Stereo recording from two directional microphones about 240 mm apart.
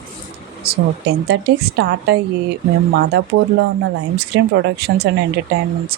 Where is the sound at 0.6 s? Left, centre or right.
Right.